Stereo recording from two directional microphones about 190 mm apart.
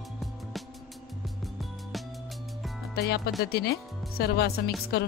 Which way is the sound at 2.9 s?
55° left (ahead or behind).